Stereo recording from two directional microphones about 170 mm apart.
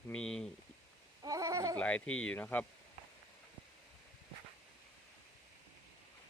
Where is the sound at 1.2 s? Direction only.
20° right (ahead or behind).